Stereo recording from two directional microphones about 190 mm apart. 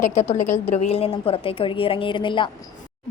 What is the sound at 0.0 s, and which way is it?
A woman's voice, 40° left (ahead or behind).